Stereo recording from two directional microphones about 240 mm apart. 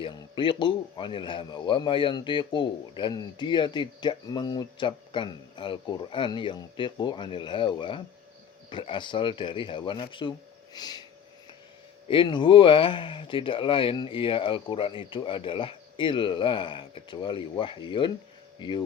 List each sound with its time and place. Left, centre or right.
0.0 s a man's voice: centre
10.8 s a sound: centre
12.0 s a man's voice: left